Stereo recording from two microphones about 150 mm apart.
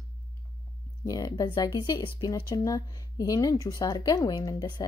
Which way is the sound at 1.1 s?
25° left (ahead or behind).